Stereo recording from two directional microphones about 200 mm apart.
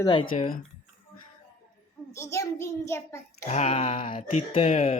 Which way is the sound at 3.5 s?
35° left (ahead or behind).